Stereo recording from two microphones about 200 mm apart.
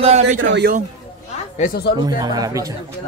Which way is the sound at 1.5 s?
45° left (ahead or behind).